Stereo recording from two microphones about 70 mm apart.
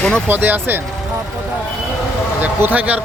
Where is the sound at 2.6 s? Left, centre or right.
Right.